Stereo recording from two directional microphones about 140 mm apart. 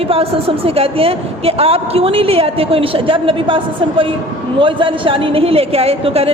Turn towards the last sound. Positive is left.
turn(degrees=-45)  # may be behind; listen again after turning